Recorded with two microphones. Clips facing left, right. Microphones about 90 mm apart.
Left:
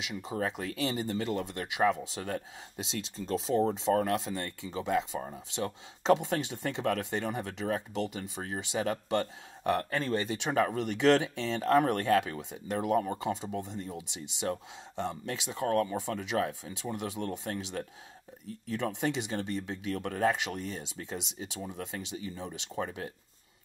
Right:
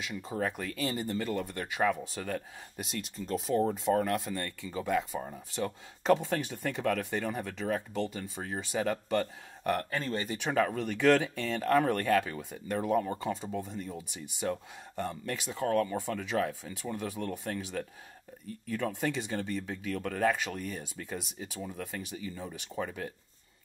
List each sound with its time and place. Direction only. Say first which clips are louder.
0.0 s speech: even; 20° left (ahead or behind)